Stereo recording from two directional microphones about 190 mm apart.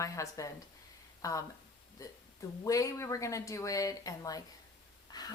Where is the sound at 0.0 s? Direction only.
15° left (ahead or behind).